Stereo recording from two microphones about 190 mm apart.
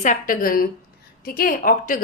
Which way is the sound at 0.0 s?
45° left (ahead or behind).